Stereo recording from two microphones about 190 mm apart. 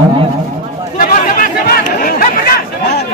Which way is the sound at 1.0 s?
45° left (ahead or behind).